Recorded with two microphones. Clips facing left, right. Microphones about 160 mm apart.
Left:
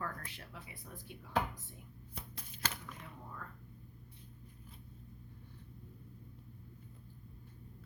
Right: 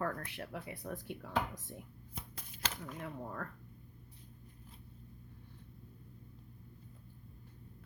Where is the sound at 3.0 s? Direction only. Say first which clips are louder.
Right 8 dB; 70° right (ahead or behind).